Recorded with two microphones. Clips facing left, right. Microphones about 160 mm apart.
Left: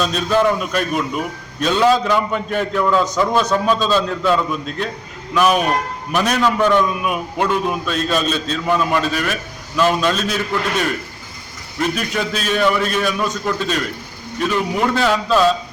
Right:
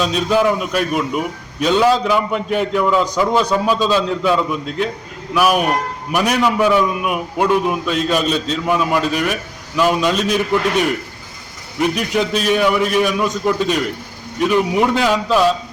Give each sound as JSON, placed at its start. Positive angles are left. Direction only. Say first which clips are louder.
{"t": 0.0, "sound": "a man's voice", "louder": "right 1 dB", "side_deg": -15}